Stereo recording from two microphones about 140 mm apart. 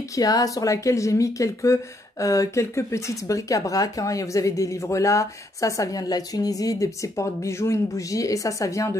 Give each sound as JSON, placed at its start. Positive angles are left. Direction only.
{"t": 0.1, "sound": "speech", "side_deg": 25}